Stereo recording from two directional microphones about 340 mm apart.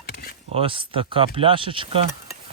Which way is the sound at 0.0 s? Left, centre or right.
Left.